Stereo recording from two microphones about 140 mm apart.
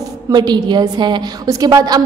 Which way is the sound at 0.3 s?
30° right (ahead or behind).